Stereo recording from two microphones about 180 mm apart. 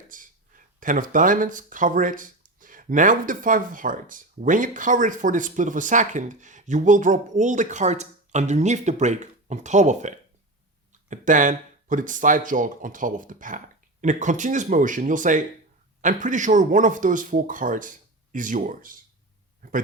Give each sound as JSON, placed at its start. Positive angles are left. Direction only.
{"t": 0.1, "sound": "speech", "side_deg": -45}